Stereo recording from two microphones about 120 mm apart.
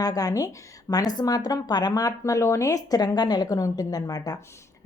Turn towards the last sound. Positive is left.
turn(degrees=30)  # may be behind; listen again after turning